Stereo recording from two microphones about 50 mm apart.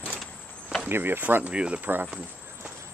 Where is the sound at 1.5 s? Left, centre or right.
Right.